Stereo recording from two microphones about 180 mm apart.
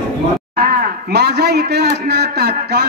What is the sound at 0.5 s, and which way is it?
A man's voice, 55° right (ahead or behind).